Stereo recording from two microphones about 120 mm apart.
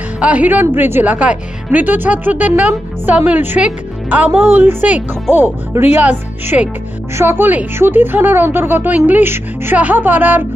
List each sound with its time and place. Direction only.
0.2 s a woman's voice: 10° right (ahead or behind)